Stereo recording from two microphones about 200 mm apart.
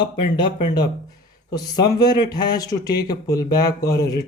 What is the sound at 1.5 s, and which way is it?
Speech, 20° left (ahead or behind).